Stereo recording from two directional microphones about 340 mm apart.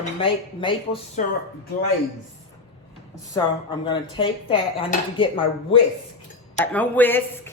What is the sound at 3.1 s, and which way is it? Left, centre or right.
Speech, centre.